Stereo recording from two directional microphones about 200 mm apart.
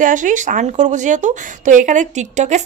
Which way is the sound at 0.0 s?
40° right (ahead or behind).